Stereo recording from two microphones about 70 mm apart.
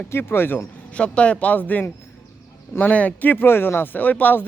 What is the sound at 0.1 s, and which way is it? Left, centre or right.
Speech, left.